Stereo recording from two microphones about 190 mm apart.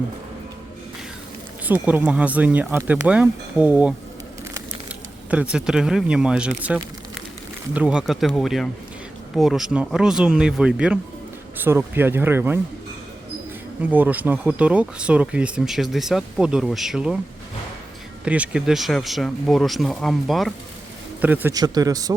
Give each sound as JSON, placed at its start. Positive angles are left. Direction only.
{"t": 1.6, "sound": "speech", "side_deg": -10}
{"t": 5.3, "sound": "speech", "side_deg": -5}
{"t": 13.9, "sound": "speech", "side_deg": -10}
{"t": 18.3, "sound": "speech", "side_deg": -5}
{"t": 21.5, "sound": "speech", "side_deg": -20}